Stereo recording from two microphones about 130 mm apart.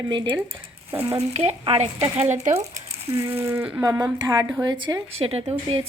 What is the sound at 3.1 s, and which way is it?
A woman's voice, 20° right (ahead or behind).